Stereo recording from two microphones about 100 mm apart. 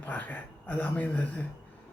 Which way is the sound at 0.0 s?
15° left (ahead or behind).